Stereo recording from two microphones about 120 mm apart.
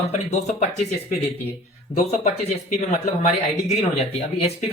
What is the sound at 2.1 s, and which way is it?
Speech, 65° left (ahead or behind).